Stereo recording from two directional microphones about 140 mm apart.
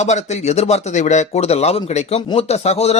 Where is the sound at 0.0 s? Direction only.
55° left (ahead or behind).